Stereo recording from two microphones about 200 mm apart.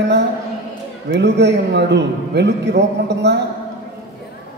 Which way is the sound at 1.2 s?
60° right (ahead or behind).